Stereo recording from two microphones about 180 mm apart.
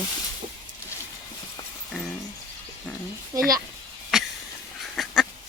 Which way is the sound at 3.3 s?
15° right (ahead or behind).